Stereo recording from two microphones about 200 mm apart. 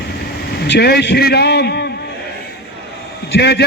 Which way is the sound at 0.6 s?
55° left (ahead or behind).